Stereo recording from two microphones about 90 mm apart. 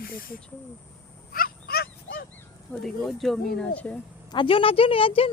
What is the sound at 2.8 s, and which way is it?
Speech, centre (ahead or behind).